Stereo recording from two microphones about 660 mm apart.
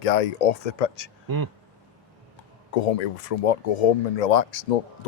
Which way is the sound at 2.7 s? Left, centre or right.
Left.